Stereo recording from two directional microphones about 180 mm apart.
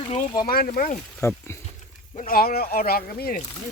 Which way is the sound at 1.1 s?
10° left (ahead or behind).